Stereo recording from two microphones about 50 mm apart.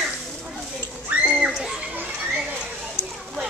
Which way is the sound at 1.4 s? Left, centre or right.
Centre.